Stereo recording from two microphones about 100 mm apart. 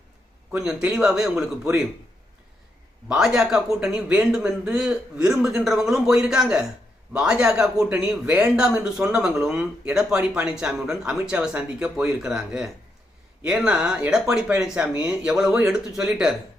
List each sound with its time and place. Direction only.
0.5 s speech: 10° right (ahead or behind)
3.1 s a man's voice: 5° right (ahead or behind)